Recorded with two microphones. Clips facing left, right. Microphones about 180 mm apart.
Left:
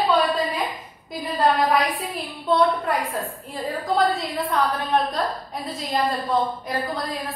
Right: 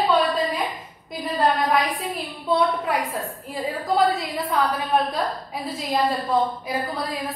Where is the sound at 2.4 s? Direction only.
5° right (ahead or behind).